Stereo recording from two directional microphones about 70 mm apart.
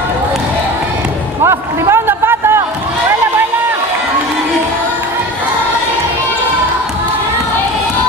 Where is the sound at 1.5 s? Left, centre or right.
Right.